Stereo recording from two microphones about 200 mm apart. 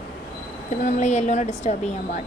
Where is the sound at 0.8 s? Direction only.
35° left (ahead or behind).